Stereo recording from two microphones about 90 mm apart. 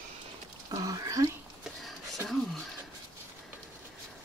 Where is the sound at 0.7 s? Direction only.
40° right (ahead or behind).